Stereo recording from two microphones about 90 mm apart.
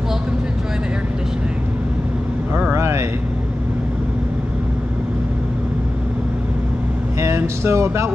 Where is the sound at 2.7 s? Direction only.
30° right (ahead or behind).